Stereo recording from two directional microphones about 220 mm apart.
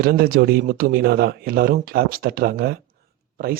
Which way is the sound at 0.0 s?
45° right (ahead or behind).